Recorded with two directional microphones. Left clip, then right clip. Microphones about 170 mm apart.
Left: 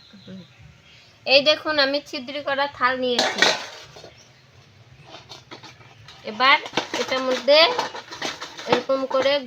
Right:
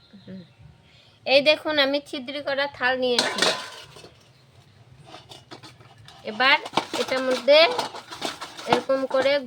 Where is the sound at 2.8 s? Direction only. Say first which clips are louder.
Left 1 dB; 25° right (ahead or behind).